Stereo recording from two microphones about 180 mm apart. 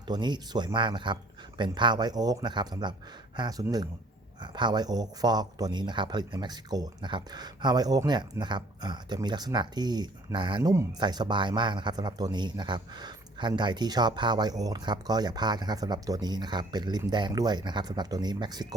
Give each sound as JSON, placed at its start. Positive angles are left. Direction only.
{"t": 0.1, "sound": "speech", "side_deg": -25}